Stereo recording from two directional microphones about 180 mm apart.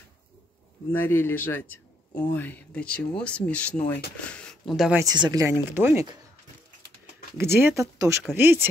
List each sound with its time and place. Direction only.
0.9 s a man's voice: 10° left (ahead or behind)
4.9 s speech: 20° right (ahead or behind)
7.3 s speech: 15° right (ahead or behind)